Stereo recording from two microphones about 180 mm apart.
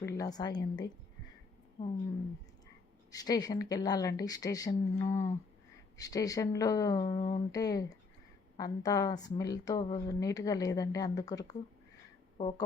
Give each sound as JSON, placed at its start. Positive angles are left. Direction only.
{"t": 0.0, "sound": "a woman's voice", "side_deg": 20}
{"t": 3.1, "sound": "a woman's voice", "side_deg": 20}